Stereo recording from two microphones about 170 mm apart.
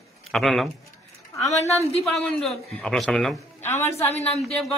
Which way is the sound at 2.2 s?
5° left (ahead or behind).